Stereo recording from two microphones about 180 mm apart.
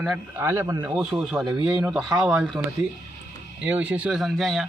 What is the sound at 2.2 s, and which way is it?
Speech, 5° right (ahead or behind).